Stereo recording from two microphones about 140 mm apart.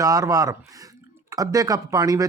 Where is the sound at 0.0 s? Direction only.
25° right (ahead or behind).